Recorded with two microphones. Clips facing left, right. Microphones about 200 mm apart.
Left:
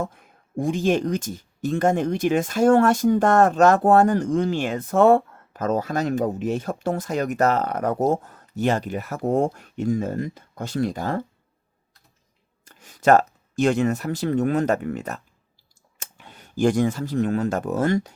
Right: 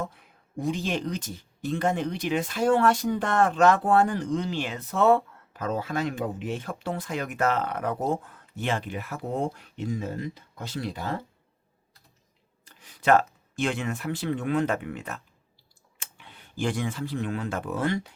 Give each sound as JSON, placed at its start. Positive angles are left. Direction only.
{"t": 0.0, "sound": "speech", "side_deg": 45}
{"t": 12.6, "sound": "speech", "side_deg": 45}